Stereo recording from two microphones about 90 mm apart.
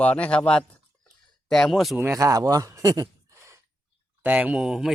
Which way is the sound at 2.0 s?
35° right (ahead or behind).